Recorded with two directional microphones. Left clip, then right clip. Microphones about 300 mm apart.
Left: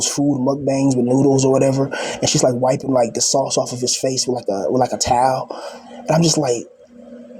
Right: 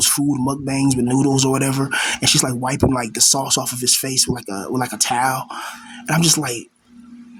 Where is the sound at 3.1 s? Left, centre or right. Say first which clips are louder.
Left 1 dB; right.